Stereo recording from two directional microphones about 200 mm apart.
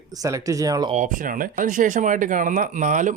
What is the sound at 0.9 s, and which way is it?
Speech, 40° right (ahead or behind).